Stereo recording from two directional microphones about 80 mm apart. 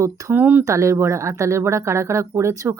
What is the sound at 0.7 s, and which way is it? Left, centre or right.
Speech, right.